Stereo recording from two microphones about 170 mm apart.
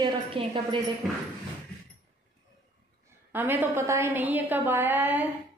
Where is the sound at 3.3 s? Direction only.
10° right (ahead or behind).